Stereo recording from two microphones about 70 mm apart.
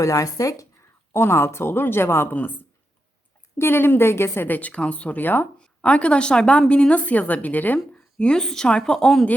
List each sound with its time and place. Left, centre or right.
0.0 s speech: left
1.1 s a woman's voice: left
3.6 s a woman's voice: left
5.8 s a woman's voice: centre
8.2 s a woman's voice: centre